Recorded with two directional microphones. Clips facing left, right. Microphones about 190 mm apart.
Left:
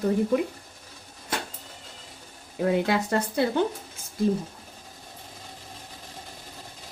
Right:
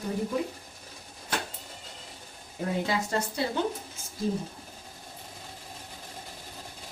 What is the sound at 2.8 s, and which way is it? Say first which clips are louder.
Speech: left 4 dB; 60° left (ahead or behind).